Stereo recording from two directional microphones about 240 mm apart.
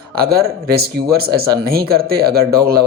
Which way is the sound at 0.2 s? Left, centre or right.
Right.